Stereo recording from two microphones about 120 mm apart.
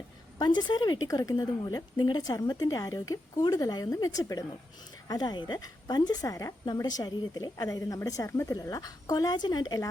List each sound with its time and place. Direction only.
0.3 s a woman's voice: 35° left (ahead or behind)